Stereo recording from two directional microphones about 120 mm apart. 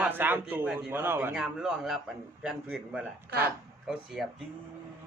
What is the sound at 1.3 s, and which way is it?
Speech, 5° right (ahead or behind).